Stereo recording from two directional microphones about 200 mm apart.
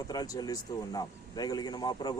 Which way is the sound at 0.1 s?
20° left (ahead or behind).